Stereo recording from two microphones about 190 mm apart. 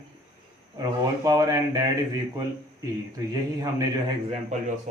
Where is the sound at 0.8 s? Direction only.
20° right (ahead or behind).